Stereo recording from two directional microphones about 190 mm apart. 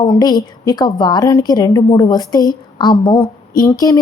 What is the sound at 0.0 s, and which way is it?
A woman's voice, 20° left (ahead or behind).